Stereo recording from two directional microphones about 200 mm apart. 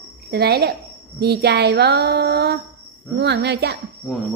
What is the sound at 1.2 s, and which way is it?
Female singing, 55° right (ahead or behind).